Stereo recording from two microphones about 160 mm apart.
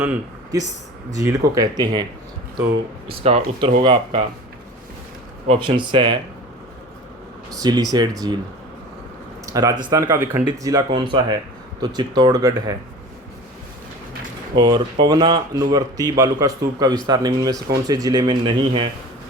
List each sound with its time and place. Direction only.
0.5 s speech: 20° right (ahead or behind)
3.1 s speech: 35° right (ahead or behind)
5.5 s speech: 30° right (ahead or behind)
7.5 s speech: 25° right (ahead or behind)
9.5 s speech: 20° right (ahead or behind)
14.5 s speech: 25° right (ahead or behind)